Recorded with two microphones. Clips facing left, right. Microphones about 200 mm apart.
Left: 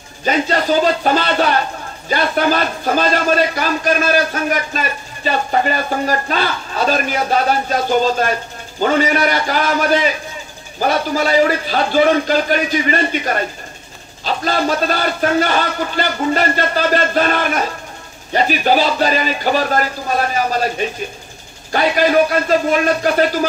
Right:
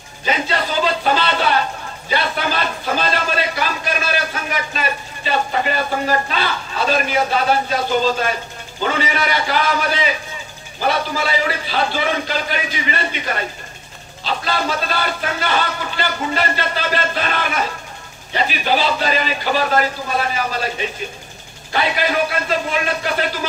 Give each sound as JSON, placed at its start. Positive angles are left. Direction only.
{"t": 0.2, "sound": "speech", "side_deg": 45}
{"t": 21.7, "sound": "speech", "side_deg": 45}